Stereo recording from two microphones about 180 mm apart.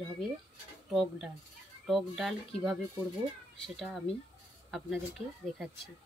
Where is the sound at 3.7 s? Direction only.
Centre (ahead or behind).